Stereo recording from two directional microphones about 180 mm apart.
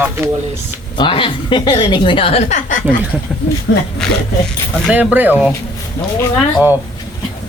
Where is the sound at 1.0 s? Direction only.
30° left (ahead or behind).